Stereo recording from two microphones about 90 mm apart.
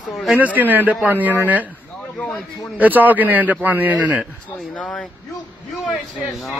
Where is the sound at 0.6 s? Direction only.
20° right (ahead or behind).